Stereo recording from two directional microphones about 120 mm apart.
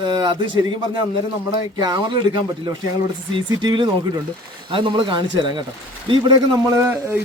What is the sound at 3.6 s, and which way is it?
Speech, 40° right (ahead or behind).